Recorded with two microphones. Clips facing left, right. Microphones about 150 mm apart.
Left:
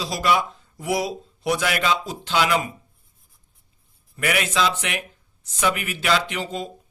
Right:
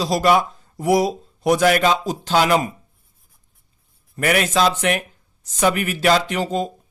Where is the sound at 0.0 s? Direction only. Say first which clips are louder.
Right 5 dB; 40° right (ahead or behind).